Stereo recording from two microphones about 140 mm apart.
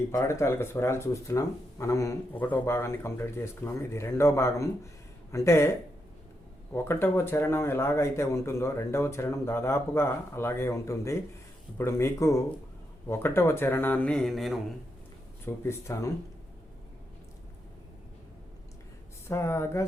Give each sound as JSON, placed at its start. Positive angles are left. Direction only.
{"t": 0.1, "sound": "speech", "side_deg": 25}
{"t": 6.7, "sound": "speech", "side_deg": 15}
{"t": 15.4, "sound": "speech", "side_deg": 20}
{"t": 19.3, "sound": "speech", "side_deg": 20}